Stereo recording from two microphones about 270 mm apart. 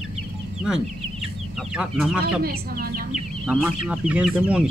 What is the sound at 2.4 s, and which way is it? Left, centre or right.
Speech, right.